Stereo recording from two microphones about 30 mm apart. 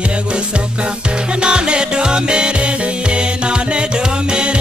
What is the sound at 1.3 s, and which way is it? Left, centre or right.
Music, right.